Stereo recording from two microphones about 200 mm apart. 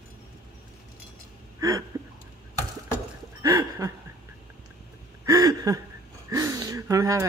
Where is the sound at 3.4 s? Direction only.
15° right (ahead or behind).